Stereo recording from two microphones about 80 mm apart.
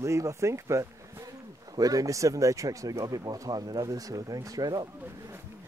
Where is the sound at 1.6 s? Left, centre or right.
Right.